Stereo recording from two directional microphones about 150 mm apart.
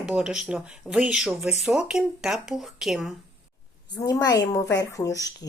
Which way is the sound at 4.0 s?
25° left (ahead or behind).